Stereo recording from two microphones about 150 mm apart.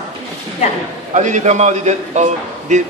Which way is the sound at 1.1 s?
55° right (ahead or behind).